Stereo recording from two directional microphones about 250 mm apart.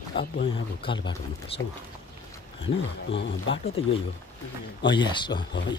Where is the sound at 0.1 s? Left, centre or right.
Left.